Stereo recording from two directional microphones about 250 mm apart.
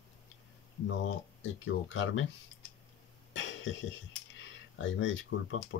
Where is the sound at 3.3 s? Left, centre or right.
Left.